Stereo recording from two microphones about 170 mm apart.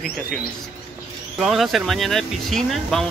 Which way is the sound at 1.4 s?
Centre (ahead or behind).